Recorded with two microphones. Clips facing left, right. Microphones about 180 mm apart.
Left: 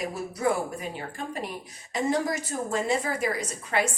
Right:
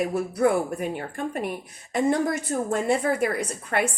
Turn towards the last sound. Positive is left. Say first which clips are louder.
# right 2 dB
turn(degrees=-55)  # may be behind; listen again after turning